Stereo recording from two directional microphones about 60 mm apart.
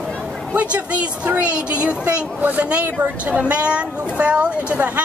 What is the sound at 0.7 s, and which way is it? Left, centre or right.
Speech, right.